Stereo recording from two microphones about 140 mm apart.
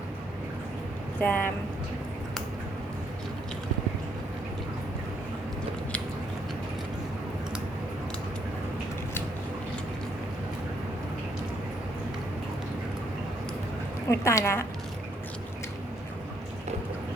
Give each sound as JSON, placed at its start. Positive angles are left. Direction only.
{"t": 1.2, "sound": "speech", "side_deg": 10}
{"t": 14.1, "sound": "a woman's voice", "side_deg": 20}